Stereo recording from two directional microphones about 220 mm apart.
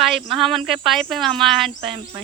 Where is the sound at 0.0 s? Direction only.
Centre (ahead or behind).